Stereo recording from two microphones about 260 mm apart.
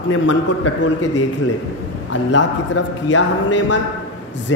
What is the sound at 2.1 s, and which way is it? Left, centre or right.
A man's voice, left.